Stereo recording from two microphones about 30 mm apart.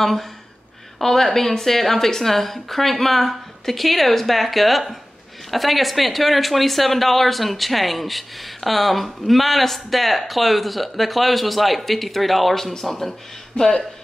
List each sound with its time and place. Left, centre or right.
0.0 s a woman's voice: centre
13.6 s speech: left